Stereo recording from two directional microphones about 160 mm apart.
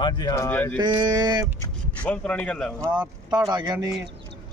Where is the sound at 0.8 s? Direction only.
25° right (ahead or behind).